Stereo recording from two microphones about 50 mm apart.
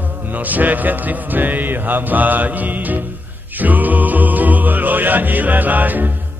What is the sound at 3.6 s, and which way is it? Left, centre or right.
Music, right.